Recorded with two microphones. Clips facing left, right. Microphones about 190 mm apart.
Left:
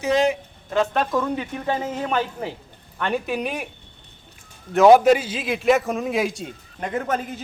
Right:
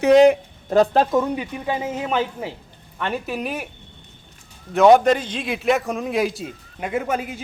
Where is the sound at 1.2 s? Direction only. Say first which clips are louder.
Right 2 dB; 10° right (ahead or behind).